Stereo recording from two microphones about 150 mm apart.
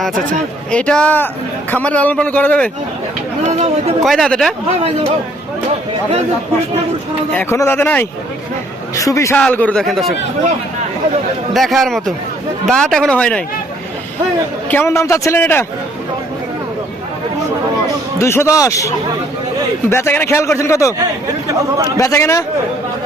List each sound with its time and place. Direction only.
0.7 s speech: 5° left (ahead or behind)
3.5 s a sound: 45° right (ahead or behind)
4.0 s a man's voice: centre (ahead or behind)
7.3 s a man's voice: 15° left (ahead or behind)
9.4 s a man's voice: 10° left (ahead or behind)
11.5 s a man's voice: centre (ahead or behind)
14.7 s speech: 15° left (ahead or behind)
18.2 s a man's voice: 20° left (ahead or behind)
21.0 s speech: 25° right (ahead or behind)
21.9 s a man's voice: 20° left (ahead or behind)